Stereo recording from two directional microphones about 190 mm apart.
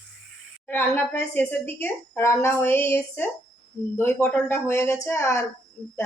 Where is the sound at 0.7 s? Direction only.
10° left (ahead or behind).